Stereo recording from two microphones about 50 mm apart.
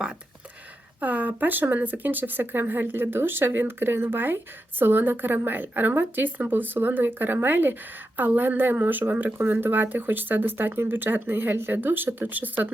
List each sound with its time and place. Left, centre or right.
1.0 s speech: right